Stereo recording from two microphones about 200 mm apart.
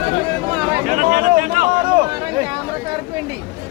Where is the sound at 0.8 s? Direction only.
40° right (ahead or behind).